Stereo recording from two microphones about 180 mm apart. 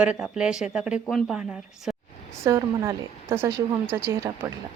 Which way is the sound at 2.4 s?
15° right (ahead or behind).